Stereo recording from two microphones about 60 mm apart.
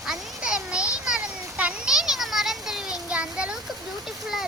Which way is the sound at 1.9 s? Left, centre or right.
Centre.